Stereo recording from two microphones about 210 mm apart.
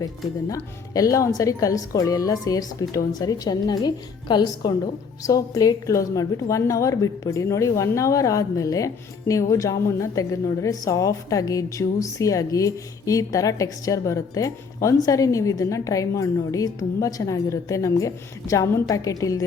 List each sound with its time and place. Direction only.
0.4 s a woman's voice: 15° left (ahead or behind)